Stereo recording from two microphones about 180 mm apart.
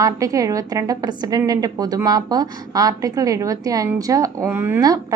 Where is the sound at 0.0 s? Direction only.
20° right (ahead or behind).